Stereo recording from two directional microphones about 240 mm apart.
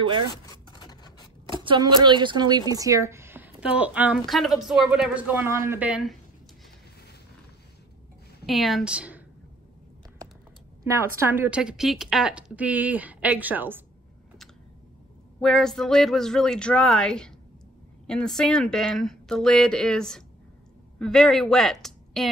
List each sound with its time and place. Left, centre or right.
0.3 s a sound: centre
1.6 s a woman's voice: centre
8.5 s speech: centre
11.2 s a woman's voice: centre
15.4 s speech: centre